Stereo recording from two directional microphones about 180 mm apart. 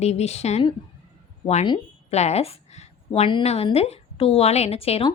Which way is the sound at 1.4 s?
30° left (ahead or behind).